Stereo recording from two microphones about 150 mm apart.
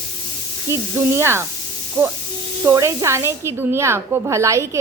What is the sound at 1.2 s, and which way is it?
A woman's voice, 15° right (ahead or behind).